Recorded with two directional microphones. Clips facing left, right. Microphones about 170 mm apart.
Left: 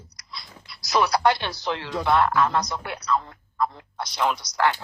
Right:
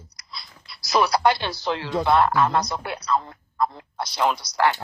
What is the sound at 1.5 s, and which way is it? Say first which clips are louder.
Speech: right 2 dB; 30° right (ahead or behind).